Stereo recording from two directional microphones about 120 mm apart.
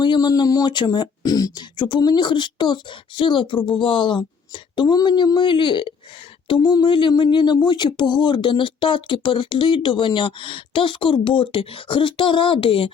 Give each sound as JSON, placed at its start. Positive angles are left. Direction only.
{"t": 0.0, "sound": "speech", "side_deg": 35}